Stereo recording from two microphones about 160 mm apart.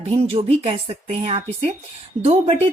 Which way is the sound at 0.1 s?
40° right (ahead or behind).